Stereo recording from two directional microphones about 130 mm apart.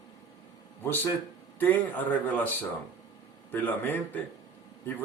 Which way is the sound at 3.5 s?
15° left (ahead or behind).